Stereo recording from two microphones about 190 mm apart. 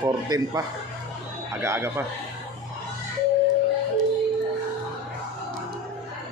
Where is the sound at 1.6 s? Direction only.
15° right (ahead or behind).